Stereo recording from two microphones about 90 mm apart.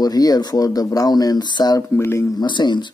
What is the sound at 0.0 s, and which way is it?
Speech, 45° left (ahead or behind).